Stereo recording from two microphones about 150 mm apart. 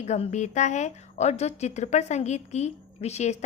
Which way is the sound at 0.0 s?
50° left (ahead or behind).